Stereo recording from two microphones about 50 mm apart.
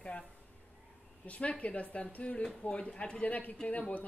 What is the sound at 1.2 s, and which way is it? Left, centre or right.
Speech, left.